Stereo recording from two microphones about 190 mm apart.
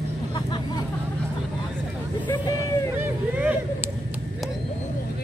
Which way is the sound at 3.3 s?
10° right (ahead or behind).